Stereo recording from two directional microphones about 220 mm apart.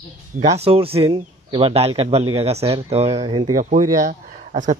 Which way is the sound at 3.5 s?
35° right (ahead or behind).